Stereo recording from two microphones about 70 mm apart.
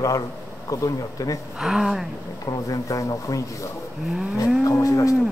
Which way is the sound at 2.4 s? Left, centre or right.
Left.